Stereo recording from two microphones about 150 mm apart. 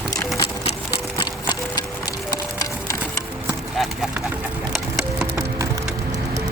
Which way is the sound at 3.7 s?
Centre (ahead or behind).